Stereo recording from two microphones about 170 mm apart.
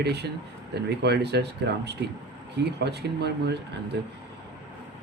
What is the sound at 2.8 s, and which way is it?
Speech, 75° right (ahead or behind).